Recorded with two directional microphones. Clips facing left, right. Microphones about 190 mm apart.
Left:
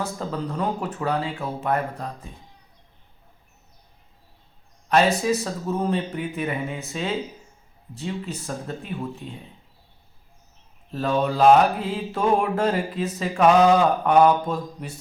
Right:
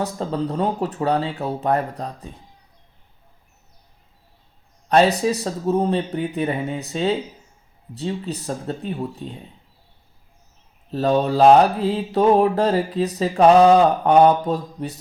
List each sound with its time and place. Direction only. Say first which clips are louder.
0.0 s mantra: right 4 dB; 35° right (ahead or behind)
4.9 s mantra: right 3 dB; 35° right (ahead or behind)
10.9 s mantra: right 4 dB; 35° right (ahead or behind)